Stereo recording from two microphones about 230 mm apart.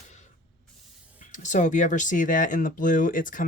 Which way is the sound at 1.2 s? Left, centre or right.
Left.